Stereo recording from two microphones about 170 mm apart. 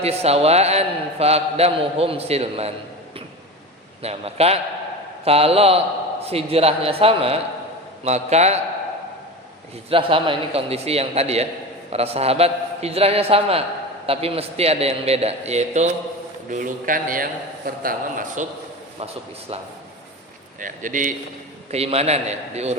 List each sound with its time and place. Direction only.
0.0 s a man's voice: 35° right (ahead or behind)
4.0 s a man's voice: 35° right (ahead or behind)
9.9 s a man's voice: 30° right (ahead or behind)
16.5 s a man's voice: 50° right (ahead or behind)
18.9 s a man's voice: 35° right (ahead or behind)
20.6 s a man's voice: 50° right (ahead or behind)
21.7 s a man's voice: 35° right (ahead or behind)